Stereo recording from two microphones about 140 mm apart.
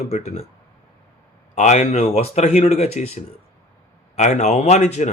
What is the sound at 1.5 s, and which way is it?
Speech, 55° left (ahead or behind).